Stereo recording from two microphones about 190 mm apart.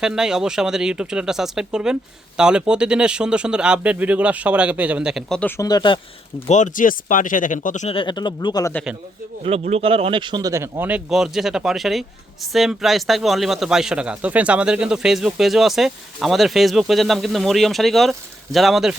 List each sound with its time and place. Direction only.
0.0 s speech: 5° right (ahead or behind); by 6.0 s 25° left (ahead or behind)
6.5 s speech: 40° left (ahead or behind); by 8.7 s 20° left (ahead or behind)
9.4 s speech: 30° right (ahead or behind); by 18.9 s centre (ahead or behind)